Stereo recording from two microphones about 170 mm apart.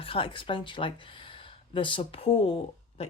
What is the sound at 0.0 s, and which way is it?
Speech, 30° left (ahead or behind).